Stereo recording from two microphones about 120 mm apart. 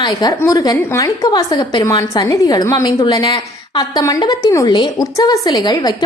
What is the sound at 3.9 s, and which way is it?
A woman's voice, 30° left (ahead or behind).